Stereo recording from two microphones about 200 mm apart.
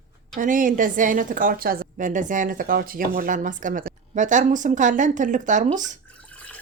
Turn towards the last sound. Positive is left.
turn(degrees=5)  # may be behind; listen again after turning